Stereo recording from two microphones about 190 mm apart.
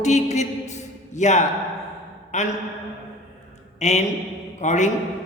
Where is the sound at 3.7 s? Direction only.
35° left (ahead or behind).